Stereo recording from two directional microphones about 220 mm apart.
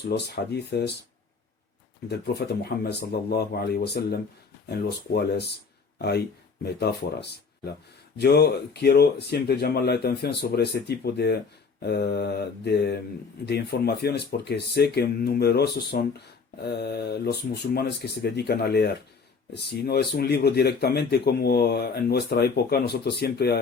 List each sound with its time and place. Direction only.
0.1 s speech: 45° left (ahead or behind)
2.0 s speech: 45° left (ahead or behind)